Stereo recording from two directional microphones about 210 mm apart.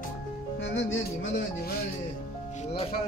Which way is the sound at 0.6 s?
60° left (ahead or behind).